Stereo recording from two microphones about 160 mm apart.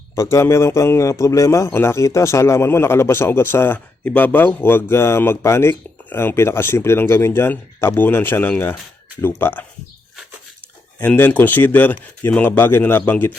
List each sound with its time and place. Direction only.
0.2 s a man's voice: 20° left (ahead or behind)
11.0 s a man's voice: 10° left (ahead or behind)